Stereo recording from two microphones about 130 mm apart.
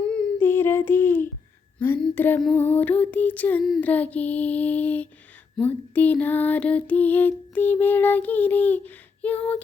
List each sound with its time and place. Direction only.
0.1 s child singing: 15° left (ahead or behind)
1.8 s female singing: 15° left (ahead or behind)